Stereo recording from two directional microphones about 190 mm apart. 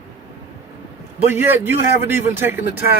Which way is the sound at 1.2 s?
10° right (ahead or behind).